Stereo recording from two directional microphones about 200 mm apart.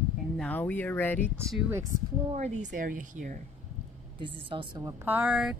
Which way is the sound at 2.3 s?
35° right (ahead or behind).